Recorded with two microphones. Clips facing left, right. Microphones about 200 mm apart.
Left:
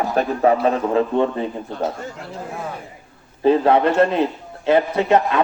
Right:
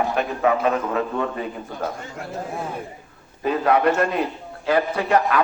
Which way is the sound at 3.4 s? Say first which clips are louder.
Left 4 dB; 30° left (ahead or behind).